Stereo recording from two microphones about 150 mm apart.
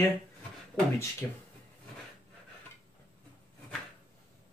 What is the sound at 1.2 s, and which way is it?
Speech, 15° left (ahead or behind).